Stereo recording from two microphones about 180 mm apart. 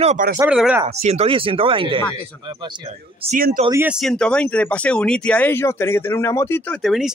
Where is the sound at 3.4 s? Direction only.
55° right (ahead or behind).